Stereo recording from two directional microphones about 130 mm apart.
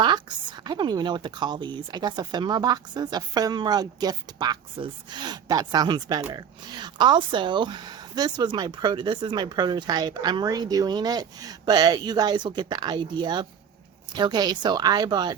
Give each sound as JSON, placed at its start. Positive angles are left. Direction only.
{"t": 0.0, "sound": "speech", "side_deg": -35}